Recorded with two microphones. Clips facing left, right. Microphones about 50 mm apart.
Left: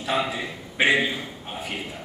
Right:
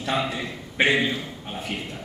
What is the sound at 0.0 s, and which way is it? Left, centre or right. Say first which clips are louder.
A man's voice: even; centre.